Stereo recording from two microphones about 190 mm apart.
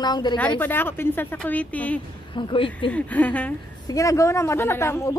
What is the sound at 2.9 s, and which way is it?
Speech, 5° left (ahead or behind).